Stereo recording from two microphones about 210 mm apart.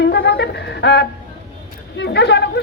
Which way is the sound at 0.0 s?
55° left (ahead or behind).